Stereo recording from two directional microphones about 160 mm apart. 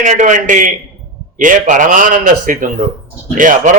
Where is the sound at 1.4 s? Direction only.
55° right (ahead or behind).